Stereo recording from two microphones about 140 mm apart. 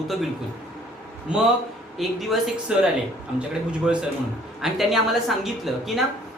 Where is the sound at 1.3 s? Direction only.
5° right (ahead or behind).